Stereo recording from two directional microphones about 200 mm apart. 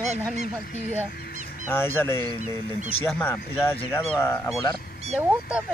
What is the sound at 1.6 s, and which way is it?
Speech, 10° left (ahead or behind).